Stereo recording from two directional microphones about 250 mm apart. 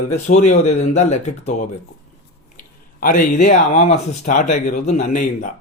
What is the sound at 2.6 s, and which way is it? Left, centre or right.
Speech, left.